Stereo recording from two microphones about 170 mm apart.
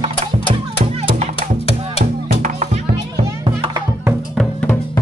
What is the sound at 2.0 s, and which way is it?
Music, 50° right (ahead or behind).